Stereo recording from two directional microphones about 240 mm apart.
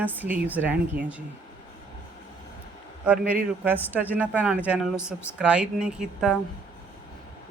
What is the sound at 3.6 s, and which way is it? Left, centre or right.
A woman's voice, centre.